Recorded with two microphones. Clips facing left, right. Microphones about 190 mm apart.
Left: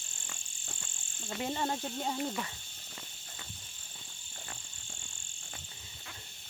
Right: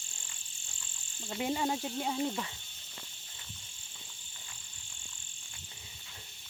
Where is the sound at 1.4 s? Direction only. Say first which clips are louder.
Right 2 dB; 10° right (ahead or behind).